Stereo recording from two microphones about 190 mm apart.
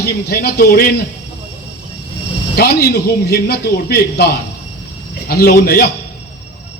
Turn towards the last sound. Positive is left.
turn(degrees=55)  # may be behind; listen again after turning